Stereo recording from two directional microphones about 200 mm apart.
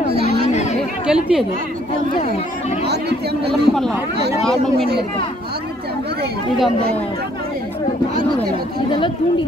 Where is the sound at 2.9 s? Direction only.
55° right (ahead or behind).